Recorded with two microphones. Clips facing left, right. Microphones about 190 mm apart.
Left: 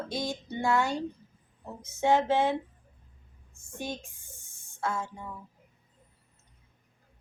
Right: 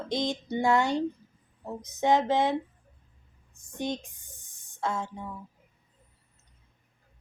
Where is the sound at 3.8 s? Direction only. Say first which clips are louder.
Right 5 dB; 20° right (ahead or behind).